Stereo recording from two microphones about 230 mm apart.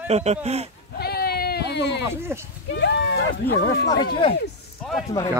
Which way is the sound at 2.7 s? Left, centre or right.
Left.